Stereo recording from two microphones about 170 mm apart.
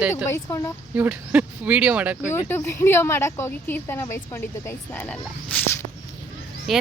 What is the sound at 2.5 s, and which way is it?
A woman's voice, 15° left (ahead or behind).